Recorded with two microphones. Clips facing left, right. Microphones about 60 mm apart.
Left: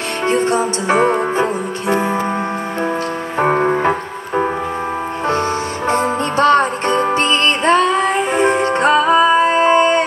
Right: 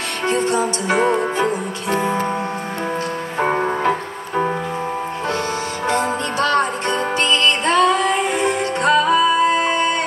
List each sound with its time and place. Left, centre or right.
0.3 s music: left
3.3 s music: left
5.9 s music: left